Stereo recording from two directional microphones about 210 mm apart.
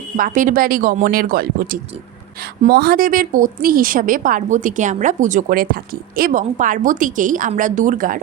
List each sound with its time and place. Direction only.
0.2 s a woman's voice: 40° right (ahead or behind)